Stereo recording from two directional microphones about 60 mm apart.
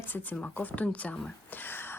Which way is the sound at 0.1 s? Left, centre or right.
Left.